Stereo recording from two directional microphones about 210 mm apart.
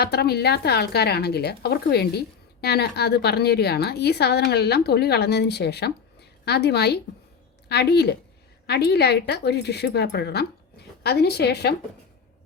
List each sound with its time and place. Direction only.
0.0 s a woman's voice: 50° left (ahead or behind)